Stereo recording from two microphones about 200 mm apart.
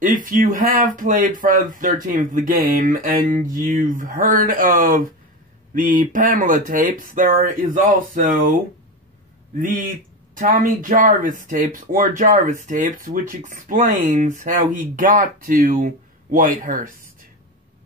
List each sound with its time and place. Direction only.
0.0 s speech: 40° right (ahead or behind)
10.3 s speech: 40° right (ahead or behind)